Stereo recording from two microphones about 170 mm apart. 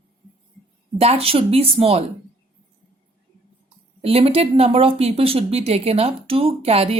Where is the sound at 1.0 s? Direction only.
35° right (ahead or behind).